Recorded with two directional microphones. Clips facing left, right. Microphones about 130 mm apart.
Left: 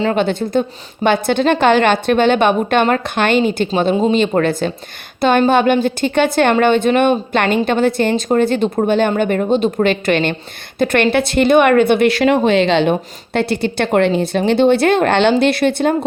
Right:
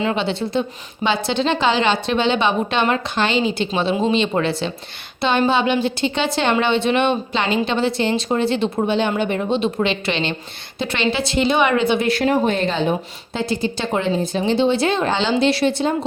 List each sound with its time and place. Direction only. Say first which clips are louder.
0.2 s a woman's voice: left 5 dB; 50° left (ahead or behind)